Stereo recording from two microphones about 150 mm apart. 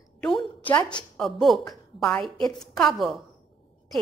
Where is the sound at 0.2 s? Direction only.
5° left (ahead or behind).